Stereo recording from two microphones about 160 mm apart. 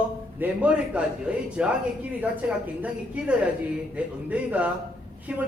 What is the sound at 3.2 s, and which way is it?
A man's voice, 5° right (ahead or behind).